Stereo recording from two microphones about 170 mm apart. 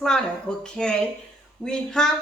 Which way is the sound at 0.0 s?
5° left (ahead or behind).